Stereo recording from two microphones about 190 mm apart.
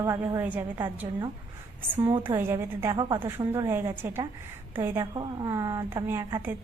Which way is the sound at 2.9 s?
25° right (ahead or behind).